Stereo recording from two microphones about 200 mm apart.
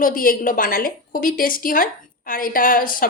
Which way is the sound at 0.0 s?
45° left (ahead or behind).